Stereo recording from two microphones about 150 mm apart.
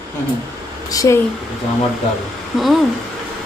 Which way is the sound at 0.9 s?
20° left (ahead or behind).